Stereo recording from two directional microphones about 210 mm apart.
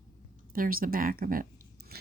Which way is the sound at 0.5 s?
40° right (ahead or behind).